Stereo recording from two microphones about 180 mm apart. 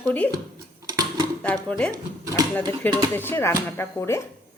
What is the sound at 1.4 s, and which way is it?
Speech, 5° left (ahead or behind).